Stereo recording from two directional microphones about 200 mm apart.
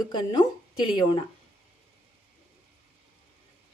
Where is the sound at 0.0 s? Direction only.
20° left (ahead or behind).